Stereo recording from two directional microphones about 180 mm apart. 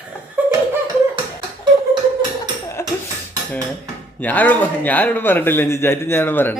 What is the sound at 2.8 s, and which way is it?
Dishes, 15° left (ahead or behind).